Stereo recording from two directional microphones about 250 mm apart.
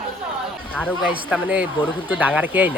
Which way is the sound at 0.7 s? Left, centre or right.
Centre.